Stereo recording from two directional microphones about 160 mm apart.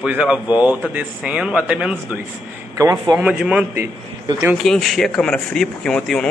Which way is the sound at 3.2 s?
5° right (ahead or behind).